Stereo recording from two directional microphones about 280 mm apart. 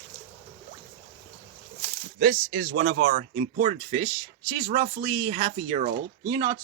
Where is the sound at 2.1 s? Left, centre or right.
Right.